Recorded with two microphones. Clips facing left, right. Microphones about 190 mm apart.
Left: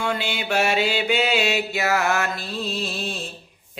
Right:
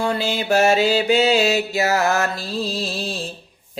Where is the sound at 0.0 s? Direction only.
35° right (ahead or behind).